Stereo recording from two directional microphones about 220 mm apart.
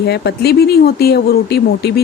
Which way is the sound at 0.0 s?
50° left (ahead or behind).